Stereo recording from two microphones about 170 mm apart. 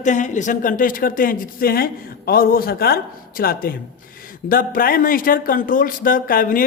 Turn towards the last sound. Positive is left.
turn(degrees=55)  # may be behind; listen again after turning